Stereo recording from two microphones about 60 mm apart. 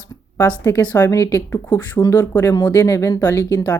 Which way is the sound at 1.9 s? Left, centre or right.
Left.